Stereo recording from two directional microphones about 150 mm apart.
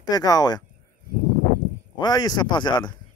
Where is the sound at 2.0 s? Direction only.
25° left (ahead or behind).